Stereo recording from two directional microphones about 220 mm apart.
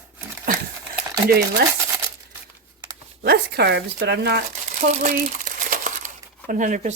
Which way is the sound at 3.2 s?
45° right (ahead or behind).